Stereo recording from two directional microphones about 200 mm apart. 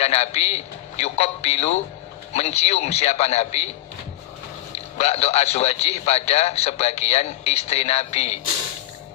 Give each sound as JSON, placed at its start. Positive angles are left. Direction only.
{"t": 0.0, "sound": "a man's voice", "side_deg": 30}
{"t": 4.9, "sound": "a man's voice", "side_deg": 30}